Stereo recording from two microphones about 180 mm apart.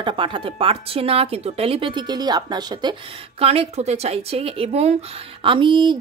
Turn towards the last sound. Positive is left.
turn(degrees=-25)  # may be behind; listen again after turning